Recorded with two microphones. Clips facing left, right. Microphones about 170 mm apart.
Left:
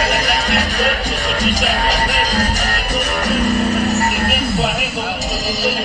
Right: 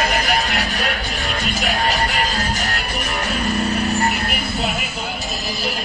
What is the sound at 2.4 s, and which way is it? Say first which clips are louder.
Music: left 4 dB; 40° left (ahead or behind).